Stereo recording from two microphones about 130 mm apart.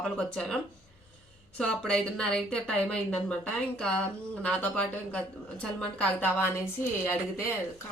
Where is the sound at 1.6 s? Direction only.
5° left (ahead or behind).